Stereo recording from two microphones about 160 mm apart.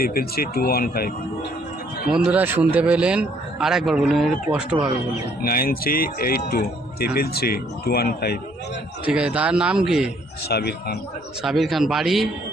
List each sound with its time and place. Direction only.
0.0 s speech: 70° left (ahead or behind)
2.1 s a man's voice: 10° right (ahead or behind)
5.4 s speech: 65° left (ahead or behind)
9.0 s a man's voice: 5° right (ahead or behind)
10.5 s a man's voice: 90° left
11.4 s a man's voice: centre (ahead or behind)